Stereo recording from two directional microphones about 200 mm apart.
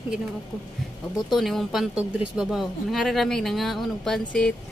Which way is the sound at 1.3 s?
Centre (ahead or behind).